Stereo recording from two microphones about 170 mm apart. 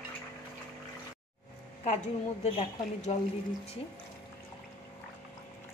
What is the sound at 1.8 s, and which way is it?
A woman's voice, 40° left (ahead or behind).